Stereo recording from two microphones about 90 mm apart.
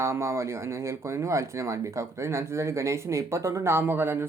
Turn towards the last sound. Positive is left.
turn(degrees=-25)  # may be behind; listen again after turning